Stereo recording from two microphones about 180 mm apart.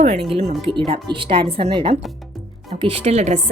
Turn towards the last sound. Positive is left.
turn(degrees=-40)  # may be behind; listen again after turning